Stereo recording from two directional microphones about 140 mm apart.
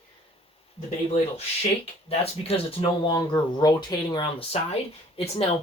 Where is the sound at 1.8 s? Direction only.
45° left (ahead or behind).